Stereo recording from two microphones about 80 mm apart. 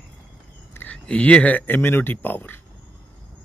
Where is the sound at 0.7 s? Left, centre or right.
Left.